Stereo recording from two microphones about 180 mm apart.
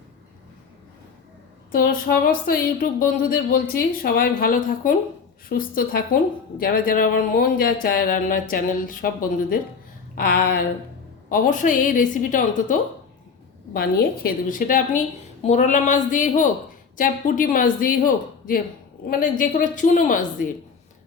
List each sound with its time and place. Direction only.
1.7 s a woman's voice: 55° left (ahead or behind)